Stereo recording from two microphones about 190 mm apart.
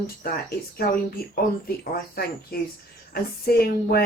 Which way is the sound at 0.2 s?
50° left (ahead or behind).